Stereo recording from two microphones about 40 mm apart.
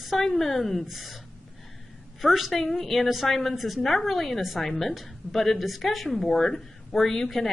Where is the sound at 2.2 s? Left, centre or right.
Centre.